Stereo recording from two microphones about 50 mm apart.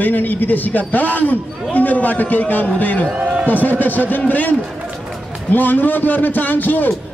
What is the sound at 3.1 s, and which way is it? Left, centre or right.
Speech, right.